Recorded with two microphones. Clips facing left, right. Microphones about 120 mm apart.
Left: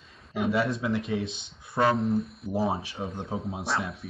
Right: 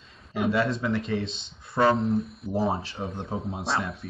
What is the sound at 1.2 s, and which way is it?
Speech, 25° right (ahead or behind).